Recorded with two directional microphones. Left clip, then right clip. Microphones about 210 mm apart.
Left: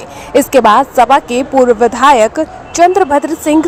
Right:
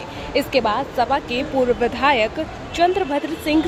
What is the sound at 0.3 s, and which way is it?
Speech, 35° left (ahead or behind).